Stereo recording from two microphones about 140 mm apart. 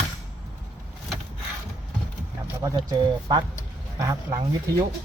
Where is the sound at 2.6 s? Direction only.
25° right (ahead or behind).